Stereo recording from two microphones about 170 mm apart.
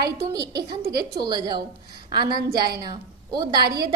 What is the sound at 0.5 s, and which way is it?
A woman's voice, 20° right (ahead or behind).